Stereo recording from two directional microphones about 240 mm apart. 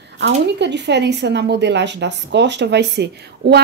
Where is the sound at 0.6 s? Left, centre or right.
Right.